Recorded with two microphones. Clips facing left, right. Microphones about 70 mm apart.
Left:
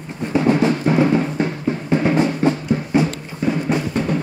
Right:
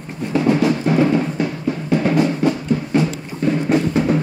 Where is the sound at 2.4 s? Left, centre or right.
Left.